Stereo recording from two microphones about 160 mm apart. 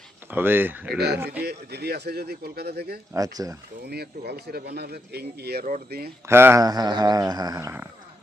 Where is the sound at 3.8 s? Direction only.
85° right.